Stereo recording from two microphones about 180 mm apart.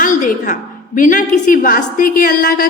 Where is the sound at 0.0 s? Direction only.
45° left (ahead or behind).